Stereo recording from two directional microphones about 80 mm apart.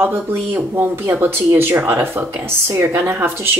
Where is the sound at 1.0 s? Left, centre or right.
Right.